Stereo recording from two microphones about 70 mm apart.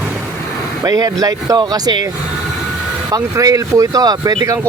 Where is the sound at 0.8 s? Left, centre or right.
Right.